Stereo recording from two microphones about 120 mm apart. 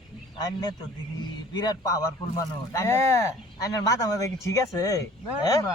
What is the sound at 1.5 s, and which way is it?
Speech, 30° left (ahead or behind).